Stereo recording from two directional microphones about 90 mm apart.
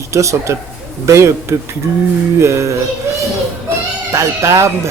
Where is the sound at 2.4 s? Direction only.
35° right (ahead or behind).